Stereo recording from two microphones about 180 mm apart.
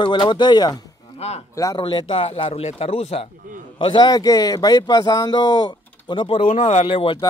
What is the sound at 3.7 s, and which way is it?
Speech, 25° left (ahead or behind).